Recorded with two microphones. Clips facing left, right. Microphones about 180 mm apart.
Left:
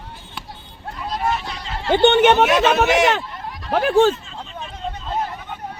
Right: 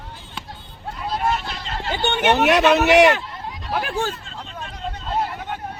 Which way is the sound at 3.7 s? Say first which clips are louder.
Left 9 dB; 55° left (ahead or behind).